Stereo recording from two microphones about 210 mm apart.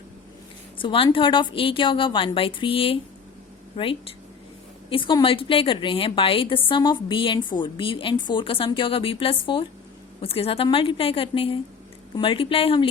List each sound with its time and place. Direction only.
0.8 s a woman's voice: 25° left (ahead or behind)